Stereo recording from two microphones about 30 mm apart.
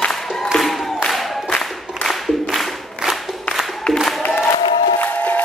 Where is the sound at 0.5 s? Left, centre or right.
Centre.